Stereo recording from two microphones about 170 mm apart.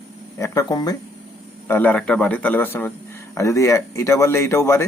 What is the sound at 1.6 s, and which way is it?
Speech, 10° left (ahead or behind).